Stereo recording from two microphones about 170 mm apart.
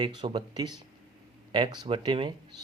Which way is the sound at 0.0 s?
25° right (ahead or behind).